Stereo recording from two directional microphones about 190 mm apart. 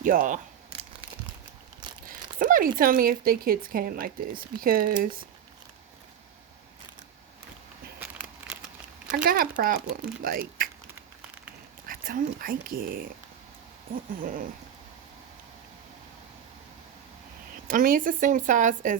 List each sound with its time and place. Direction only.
0.0 s speech: 40° right (ahead or behind)
2.0 s speech: 45° right (ahead or behind)
7.9 s a sound: 5° right (ahead or behind)
9.1 s speech: 50° right (ahead or behind)
11.9 s speech: 45° right (ahead or behind)
14.2 s speech: 50° right (ahead or behind)
17.7 s speech: 45° right (ahead or behind)